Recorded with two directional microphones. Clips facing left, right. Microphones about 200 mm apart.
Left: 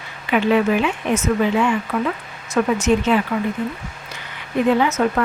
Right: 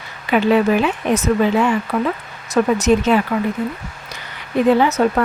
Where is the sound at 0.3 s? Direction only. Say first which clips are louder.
Right 2 dB; 40° right (ahead or behind).